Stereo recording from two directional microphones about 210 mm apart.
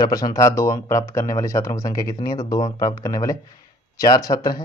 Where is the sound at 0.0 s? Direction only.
15° left (ahead or behind).